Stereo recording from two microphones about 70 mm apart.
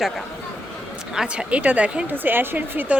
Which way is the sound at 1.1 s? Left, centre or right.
Centre.